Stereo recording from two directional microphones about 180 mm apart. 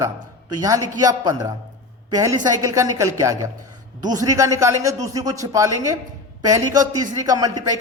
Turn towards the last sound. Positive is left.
turn(degrees=-20)  # may be behind; listen again after turning